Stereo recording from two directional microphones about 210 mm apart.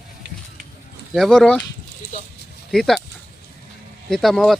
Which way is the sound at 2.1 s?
35° left (ahead or behind).